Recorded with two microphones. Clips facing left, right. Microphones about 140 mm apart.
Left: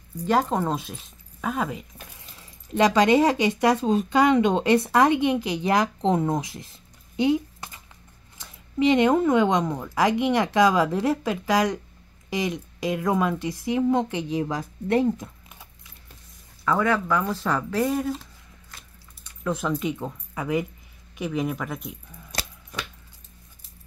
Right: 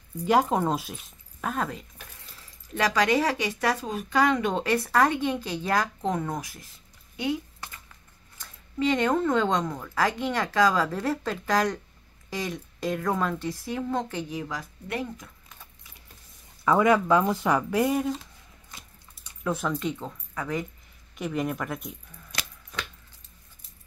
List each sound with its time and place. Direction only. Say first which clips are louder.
0.2 s speech: even; 5° right (ahead or behind)
2.8 s speech: left 6 dB; 25° left (ahead or behind)
7.2 s a sound: left 7 dB; 20° left (ahead or behind)
8.4 s speech: left 5 dB; 15° left (ahead or behind)
16.6 s speech: right 2 dB; 15° right (ahead or behind)
19.4 s speech: left 2 dB; centre (ahead or behind)
21.2 s speech: left 2 dB; centre (ahead or behind)